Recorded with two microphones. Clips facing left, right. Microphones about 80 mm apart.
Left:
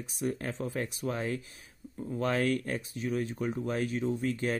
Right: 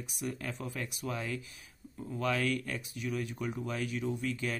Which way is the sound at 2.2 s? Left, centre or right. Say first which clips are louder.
Left 3 dB; left.